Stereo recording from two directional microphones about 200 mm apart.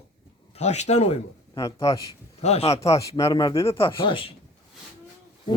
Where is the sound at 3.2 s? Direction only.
15° left (ahead or behind).